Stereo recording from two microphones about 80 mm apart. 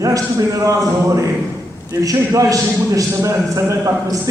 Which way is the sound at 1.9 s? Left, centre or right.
Right.